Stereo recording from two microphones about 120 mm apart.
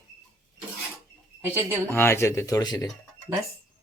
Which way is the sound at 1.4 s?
15° right (ahead or behind).